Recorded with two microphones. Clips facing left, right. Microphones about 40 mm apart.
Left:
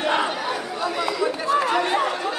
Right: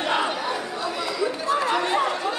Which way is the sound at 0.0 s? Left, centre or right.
Centre.